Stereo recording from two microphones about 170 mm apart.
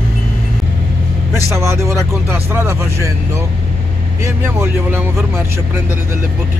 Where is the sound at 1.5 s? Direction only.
15° right (ahead or behind).